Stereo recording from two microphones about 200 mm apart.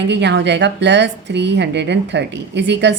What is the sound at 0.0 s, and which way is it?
A woman's voice, 60° right (ahead or behind).